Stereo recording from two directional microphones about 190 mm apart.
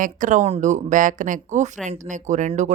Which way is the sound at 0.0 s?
40° right (ahead or behind).